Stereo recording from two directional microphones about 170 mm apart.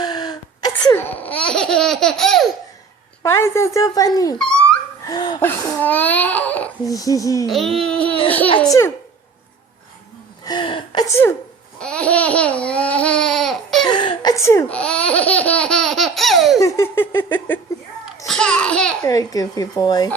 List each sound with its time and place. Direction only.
0.0 s a sound: 25° left (ahead or behind)
0.9 s laughter: 10° left (ahead or behind)
3.2 s speech: 15° left (ahead or behind)
4.4 s a sound: 5° left (ahead or behind)
5.0 s speech: 25° left (ahead or behind)
5.4 s crying: 10° left (ahead or behind)
6.8 s speech: 20° left (ahead or behind)
7.4 s speech: centre (ahead or behind)
10.4 s speech: 25° left (ahead or behind)
11.8 s babbling: 5° left (ahead or behind)
13.8 s laughter: 25° left (ahead or behind); by 16.6 s centre (ahead or behind)
16.6 s crying: 15° left (ahead or behind)
18.3 s speech: 5° left (ahead or behind)
19.0 s speech: 20° left (ahead or behind)